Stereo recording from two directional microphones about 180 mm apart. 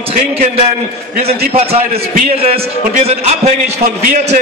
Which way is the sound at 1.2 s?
35° right (ahead or behind).